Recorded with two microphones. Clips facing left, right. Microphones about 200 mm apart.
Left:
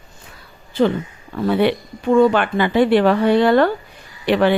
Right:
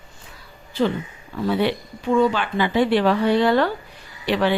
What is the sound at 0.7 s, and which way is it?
Speech, 55° left (ahead or behind).